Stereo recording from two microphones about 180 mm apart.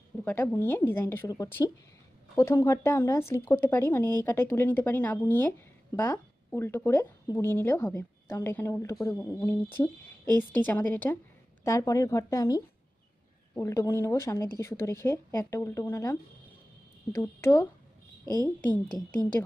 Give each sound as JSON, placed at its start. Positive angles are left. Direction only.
{"t": 0.2, "sound": "speech", "side_deg": 10}
{"t": 10.6, "sound": "speech", "side_deg": 10}